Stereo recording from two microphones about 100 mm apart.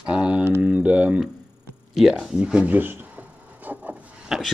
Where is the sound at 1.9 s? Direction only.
5° right (ahead or behind).